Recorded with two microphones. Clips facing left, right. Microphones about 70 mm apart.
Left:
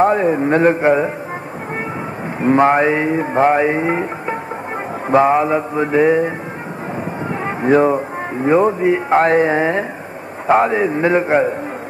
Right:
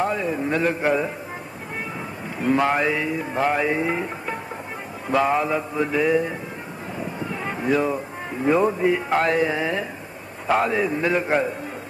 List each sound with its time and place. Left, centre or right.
0.0 s music: left
2.4 s music: left
7.2 s a man's voice: left